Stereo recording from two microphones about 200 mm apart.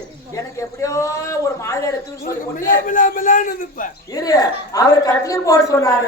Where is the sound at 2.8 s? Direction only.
40° left (ahead or behind).